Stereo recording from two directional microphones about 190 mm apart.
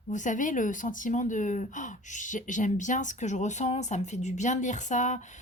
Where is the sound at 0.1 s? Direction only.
40° left (ahead or behind).